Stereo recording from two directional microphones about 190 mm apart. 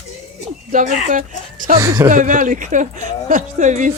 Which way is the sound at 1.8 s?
15° right (ahead or behind).